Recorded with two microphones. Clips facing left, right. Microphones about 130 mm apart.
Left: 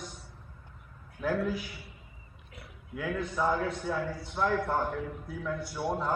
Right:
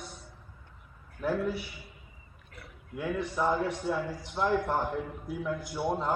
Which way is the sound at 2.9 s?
5° right (ahead or behind).